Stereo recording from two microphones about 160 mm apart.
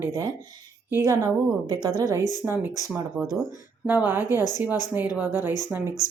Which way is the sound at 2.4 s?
10° right (ahead or behind).